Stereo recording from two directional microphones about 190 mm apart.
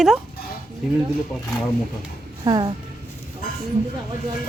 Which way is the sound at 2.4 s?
25° right (ahead or behind).